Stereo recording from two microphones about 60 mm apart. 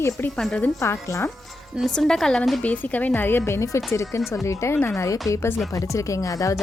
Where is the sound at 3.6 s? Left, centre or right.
Left.